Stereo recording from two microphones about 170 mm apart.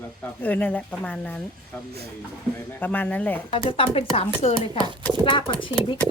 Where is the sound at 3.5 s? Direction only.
30° left (ahead or behind).